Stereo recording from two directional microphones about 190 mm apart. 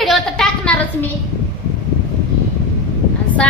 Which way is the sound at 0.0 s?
Centre (ahead or behind).